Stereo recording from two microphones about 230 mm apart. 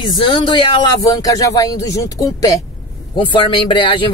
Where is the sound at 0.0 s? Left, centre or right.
Left.